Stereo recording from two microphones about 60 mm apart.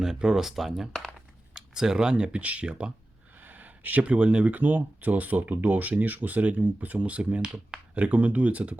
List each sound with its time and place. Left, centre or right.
0.0 s speech: centre
3.4 s speech: right